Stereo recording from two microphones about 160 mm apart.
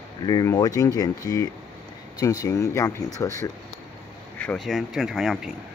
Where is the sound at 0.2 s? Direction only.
25° left (ahead or behind).